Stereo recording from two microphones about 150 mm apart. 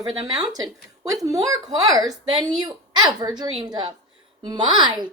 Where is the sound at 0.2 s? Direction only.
25° right (ahead or behind).